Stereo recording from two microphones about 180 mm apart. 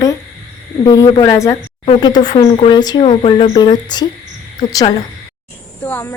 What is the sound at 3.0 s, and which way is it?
Speech, 35° left (ahead or behind).